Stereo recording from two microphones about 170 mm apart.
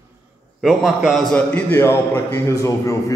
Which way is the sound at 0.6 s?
Centre (ahead or behind).